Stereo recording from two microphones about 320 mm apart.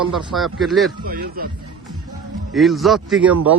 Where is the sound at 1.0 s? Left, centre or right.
Right.